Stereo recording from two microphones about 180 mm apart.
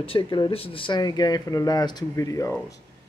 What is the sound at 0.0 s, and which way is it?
A man's voice, 30° left (ahead or behind).